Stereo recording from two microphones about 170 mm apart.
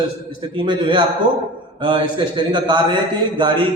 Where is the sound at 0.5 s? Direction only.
30° right (ahead or behind).